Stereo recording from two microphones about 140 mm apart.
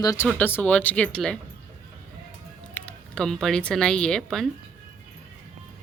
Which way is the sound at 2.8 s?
10° left (ahead or behind).